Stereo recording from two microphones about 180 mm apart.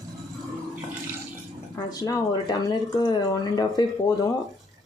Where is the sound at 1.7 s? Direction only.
20° left (ahead or behind).